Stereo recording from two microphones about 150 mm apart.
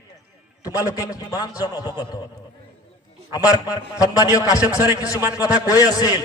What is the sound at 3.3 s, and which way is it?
A man's voice, 25° left (ahead or behind).